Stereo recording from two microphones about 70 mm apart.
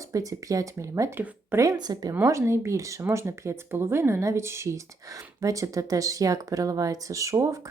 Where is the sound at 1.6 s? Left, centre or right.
Right.